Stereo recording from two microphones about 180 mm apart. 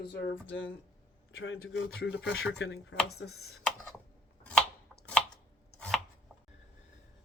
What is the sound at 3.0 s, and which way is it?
Speech, 65° left (ahead or behind).